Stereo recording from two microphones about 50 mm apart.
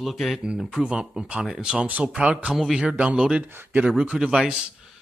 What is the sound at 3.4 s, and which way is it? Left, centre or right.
Speech, right.